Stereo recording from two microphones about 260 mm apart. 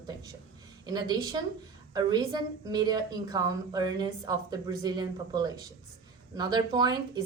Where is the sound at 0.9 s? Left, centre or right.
Centre.